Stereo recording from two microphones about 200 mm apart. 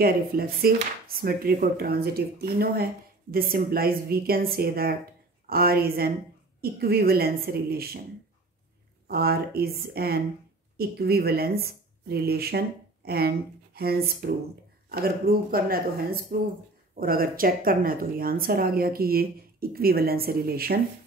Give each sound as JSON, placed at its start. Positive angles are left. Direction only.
{"t": 0.0, "sound": "speech", "side_deg": -50}
{"t": 9.0, "sound": "speech", "side_deg": -50}